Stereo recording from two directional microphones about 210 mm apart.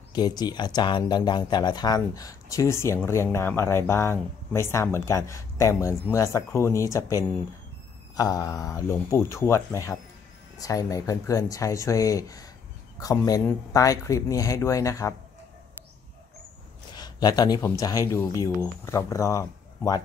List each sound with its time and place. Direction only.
0.1 s speech: 20° left (ahead or behind)
16.9 s a man's voice: 20° left (ahead or behind)